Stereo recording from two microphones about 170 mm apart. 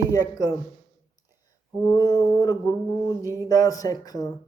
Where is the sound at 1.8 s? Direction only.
25° left (ahead or behind).